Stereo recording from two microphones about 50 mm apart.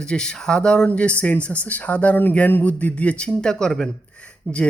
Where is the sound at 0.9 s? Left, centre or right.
Left.